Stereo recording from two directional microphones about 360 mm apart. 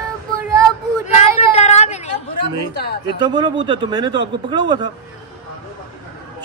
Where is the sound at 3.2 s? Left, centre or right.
Centre.